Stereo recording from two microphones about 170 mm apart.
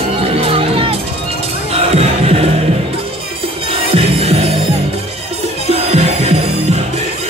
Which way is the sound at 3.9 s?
35° right (ahead or behind).